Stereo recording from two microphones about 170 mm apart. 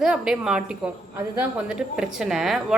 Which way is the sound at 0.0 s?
5° right (ahead or behind).